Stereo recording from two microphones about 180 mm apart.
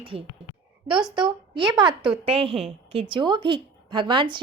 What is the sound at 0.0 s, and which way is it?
A woman's voice, 30° right (ahead or behind).